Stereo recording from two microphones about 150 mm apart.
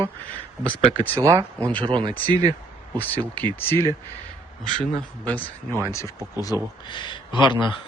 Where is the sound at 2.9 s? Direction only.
10° left (ahead or behind).